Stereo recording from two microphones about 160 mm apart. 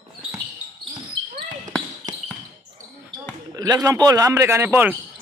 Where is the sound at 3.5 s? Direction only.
25° right (ahead or behind).